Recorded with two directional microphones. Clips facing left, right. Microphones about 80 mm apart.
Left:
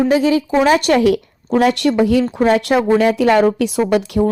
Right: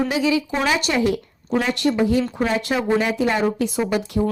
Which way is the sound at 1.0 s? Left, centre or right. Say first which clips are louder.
Left 6 dB; left.